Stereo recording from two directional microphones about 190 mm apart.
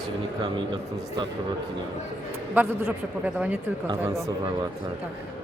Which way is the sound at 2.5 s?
10° right (ahead or behind).